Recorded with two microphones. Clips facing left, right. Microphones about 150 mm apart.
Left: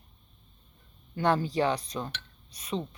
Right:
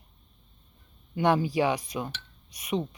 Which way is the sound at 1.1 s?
15° right (ahead or behind).